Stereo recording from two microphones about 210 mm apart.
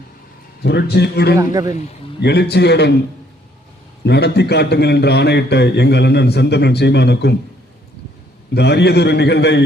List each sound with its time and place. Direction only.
0.6 s a man's voice: 50° left (ahead or behind)
1.4 s speech: 15° right (ahead or behind)
2.2 s a man's voice: 50° left (ahead or behind)
4.0 s a man's voice: 50° left (ahead or behind)
8.5 s a man's voice: 50° left (ahead or behind)